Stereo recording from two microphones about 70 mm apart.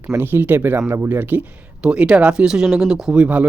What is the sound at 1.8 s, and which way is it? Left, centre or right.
Speech, centre.